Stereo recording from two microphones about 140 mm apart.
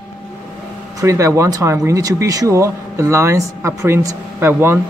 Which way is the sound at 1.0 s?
20° right (ahead or behind).